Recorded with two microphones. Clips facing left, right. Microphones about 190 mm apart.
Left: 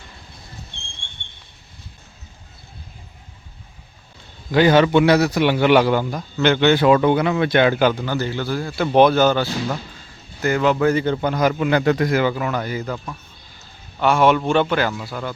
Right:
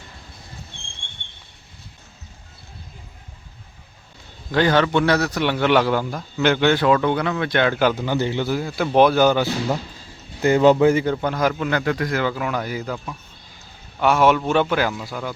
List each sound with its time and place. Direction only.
4.5 s a man's voice: 10° left (ahead or behind)
6.8 s a man's voice: 15° left (ahead or behind)
7.8 s speech: centre (ahead or behind)
8.0 s a man's voice: 20° right (ahead or behind)
8.8 s a man's voice: centre (ahead or behind)
10.4 s speech: 30° right (ahead or behind)
10.8 s a man's voice: 15° right (ahead or behind)
11.0 s speech: centre (ahead or behind)
11.7 s a man's voice: 25° left (ahead or behind)
12.0 s a man's voice: 5° left (ahead or behind)